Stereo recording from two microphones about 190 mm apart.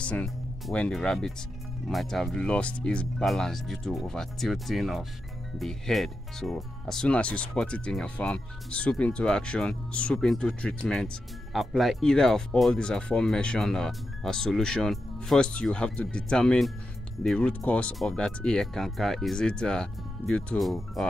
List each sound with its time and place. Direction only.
0.0 s speech: 5° left (ahead or behind)